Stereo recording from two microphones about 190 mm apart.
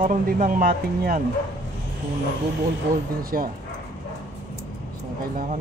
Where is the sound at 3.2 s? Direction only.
50° right (ahead or behind).